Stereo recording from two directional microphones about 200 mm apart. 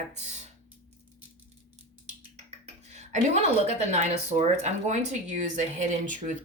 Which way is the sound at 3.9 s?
35° right (ahead or behind).